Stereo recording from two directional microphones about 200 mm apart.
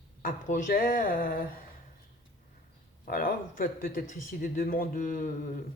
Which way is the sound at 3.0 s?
45° left (ahead or behind).